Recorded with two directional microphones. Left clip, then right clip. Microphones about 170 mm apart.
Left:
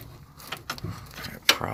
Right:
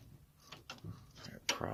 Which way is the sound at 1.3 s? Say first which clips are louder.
Left 15 dB; 30° right (ahead or behind).